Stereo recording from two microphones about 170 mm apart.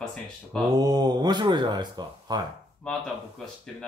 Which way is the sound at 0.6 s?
25° right (ahead or behind).